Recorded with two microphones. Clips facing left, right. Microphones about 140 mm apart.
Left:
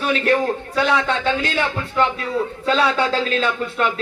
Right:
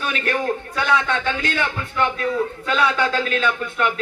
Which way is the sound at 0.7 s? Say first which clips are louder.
Left 2 dB; 30° left (ahead or behind).